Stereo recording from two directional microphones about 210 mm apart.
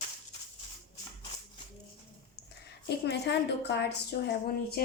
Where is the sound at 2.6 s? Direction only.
50° left (ahead or behind).